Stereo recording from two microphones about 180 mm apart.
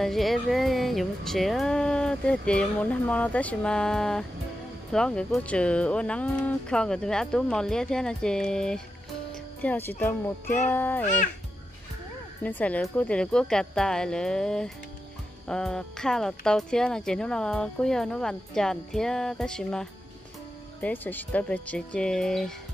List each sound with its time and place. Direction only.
0.0 s speech: centre (ahead or behind)
9.3 s music: 10° left (ahead or behind)
10.7 s speech: 10° left (ahead or behind)
12.4 s speech: 10° left (ahead or behind)